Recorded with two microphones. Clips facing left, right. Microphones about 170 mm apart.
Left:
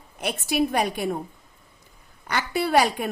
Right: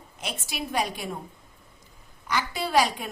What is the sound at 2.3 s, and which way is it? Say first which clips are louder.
Speech: left 3 dB; 60° left (ahead or behind).